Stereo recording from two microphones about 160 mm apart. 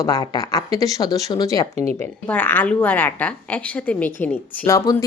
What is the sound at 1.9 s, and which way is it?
Speech, 10° left (ahead or behind).